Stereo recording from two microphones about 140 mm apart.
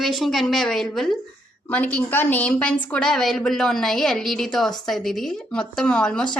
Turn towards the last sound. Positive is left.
turn(degrees=5)  # may be behind; listen again after turning